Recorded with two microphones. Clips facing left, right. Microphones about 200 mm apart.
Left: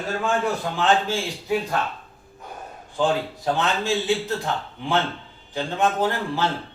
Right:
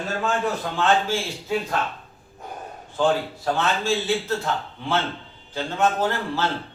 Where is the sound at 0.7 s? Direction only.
15° left (ahead or behind).